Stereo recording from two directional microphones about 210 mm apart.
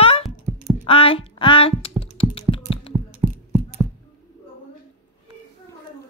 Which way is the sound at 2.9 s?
25° right (ahead or behind).